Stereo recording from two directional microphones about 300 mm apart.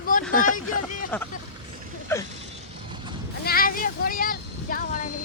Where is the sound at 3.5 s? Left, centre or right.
Left.